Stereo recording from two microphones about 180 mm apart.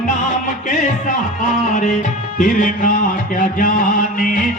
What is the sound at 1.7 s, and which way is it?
Music, 45° left (ahead or behind).